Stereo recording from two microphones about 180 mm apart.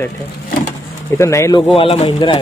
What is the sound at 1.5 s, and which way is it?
Speech, 30° left (ahead or behind).